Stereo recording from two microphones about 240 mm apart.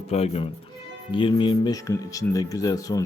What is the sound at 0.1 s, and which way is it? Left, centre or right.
Speech, left.